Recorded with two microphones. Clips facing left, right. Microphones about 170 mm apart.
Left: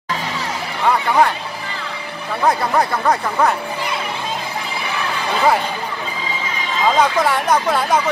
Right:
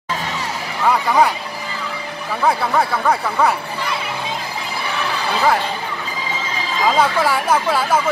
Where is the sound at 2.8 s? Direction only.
5° right (ahead or behind).